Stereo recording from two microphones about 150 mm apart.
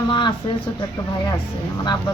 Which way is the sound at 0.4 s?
35° left (ahead or behind).